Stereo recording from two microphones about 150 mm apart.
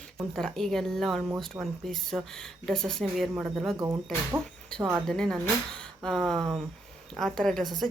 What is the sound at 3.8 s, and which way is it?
Speech, 15° right (ahead or behind).